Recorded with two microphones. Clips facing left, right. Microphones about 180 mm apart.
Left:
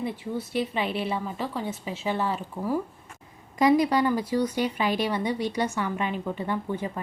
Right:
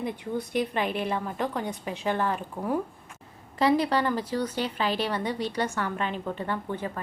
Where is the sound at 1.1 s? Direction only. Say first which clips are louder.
Right 1 dB; 5° left (ahead or behind).